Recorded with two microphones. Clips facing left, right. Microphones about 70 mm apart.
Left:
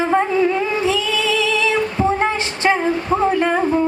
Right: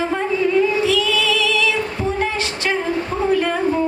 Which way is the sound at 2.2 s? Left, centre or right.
Left.